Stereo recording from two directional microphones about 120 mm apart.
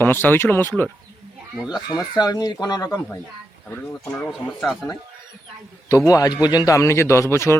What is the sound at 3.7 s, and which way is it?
Speech, 15° left (ahead or behind).